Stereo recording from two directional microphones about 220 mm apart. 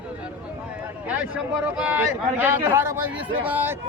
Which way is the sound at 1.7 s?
5° right (ahead or behind).